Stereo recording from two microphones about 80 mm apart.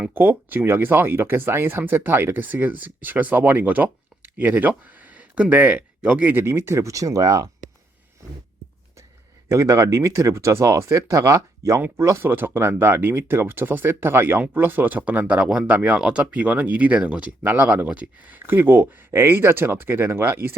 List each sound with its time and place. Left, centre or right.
0.1 s speech: right
9.5 s speech: right